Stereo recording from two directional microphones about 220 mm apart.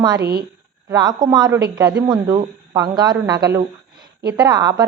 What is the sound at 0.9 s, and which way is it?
A woman's voice, 20° right (ahead or behind).